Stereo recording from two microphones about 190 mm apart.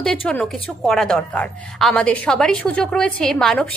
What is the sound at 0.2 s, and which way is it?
A woman's voice, 5° left (ahead or behind).